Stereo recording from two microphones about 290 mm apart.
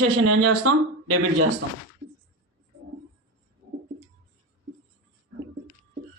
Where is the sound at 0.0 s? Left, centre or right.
Right.